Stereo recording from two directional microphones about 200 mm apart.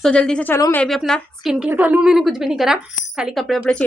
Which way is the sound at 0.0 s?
5° left (ahead or behind).